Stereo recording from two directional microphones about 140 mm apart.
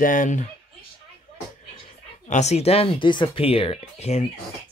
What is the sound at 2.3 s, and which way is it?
Speech, 55° left (ahead or behind).